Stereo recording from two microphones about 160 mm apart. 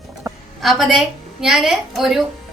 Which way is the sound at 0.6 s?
Centre (ahead or behind).